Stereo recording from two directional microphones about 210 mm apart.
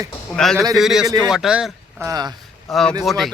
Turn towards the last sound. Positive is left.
turn(degrees=0)  # may be behind; listen again after turning